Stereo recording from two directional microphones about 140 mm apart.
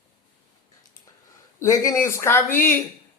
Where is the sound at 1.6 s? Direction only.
20° left (ahead or behind).